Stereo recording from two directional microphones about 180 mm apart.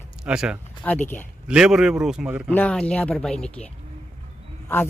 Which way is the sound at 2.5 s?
5° left (ahead or behind).